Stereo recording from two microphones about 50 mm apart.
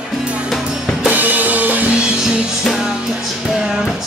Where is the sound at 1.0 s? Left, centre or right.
Right.